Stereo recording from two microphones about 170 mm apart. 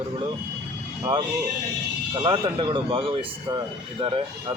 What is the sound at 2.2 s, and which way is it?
Speech, 25° right (ahead or behind).